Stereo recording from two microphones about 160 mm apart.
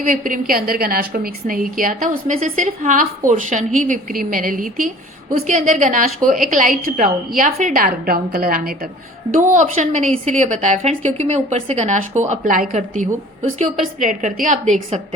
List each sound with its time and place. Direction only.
0.0 s a woman's voice: 60° right (ahead or behind)
9.5 s a woman's voice: 50° right (ahead or behind)